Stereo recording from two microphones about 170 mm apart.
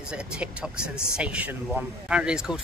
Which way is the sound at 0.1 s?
5° right (ahead or behind).